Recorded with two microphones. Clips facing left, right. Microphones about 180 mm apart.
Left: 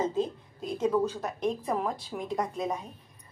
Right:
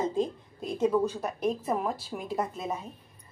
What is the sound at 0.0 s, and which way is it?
A woman's voice, 10° right (ahead or behind).